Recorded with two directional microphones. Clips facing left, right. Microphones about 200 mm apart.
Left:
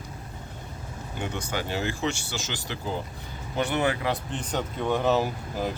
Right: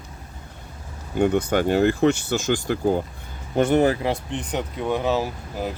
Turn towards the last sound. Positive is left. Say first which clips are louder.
# right 1 dB
turn(degrees=-5)  # may be behind; listen again after turning